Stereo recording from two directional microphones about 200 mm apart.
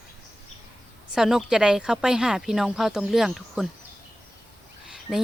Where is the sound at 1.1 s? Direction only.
Centre (ahead or behind).